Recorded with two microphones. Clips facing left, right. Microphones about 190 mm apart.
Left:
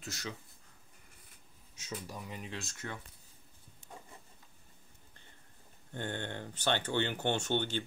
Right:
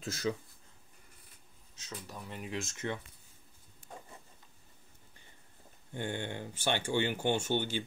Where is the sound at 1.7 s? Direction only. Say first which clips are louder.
Left 3 dB; 10° left (ahead or behind).